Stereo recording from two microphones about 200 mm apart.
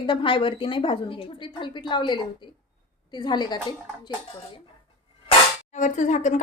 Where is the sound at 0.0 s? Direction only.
25° left (ahead or behind).